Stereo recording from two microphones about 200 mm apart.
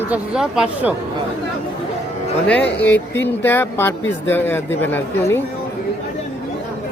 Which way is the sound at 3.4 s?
10° left (ahead or behind).